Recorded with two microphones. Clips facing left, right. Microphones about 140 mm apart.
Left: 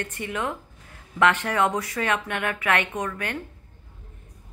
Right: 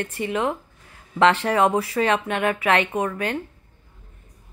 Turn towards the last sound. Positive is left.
turn(degrees=-25)  # may be behind; listen again after turning